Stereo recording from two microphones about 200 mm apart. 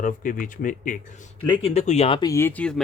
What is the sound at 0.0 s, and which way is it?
Speech, 40° left (ahead or behind).